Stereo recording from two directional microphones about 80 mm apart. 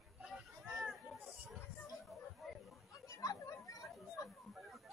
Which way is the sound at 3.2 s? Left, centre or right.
Left.